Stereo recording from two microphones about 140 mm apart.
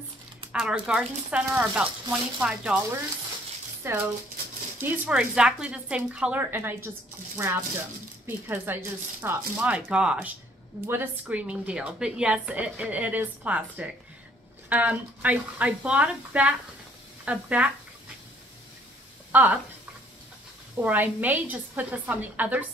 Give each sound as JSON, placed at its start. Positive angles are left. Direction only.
{"t": 0.5, "sound": "a woman's voice", "side_deg": -5}
{"t": 3.8, "sound": "a woman's voice", "side_deg": -20}
{"t": 19.3, "sound": "speech", "side_deg": -10}
{"t": 20.7, "sound": "a woman's voice", "side_deg": -10}